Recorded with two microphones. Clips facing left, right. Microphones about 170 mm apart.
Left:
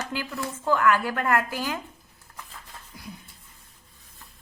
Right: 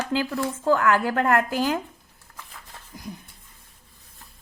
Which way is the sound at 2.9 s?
45° right (ahead or behind).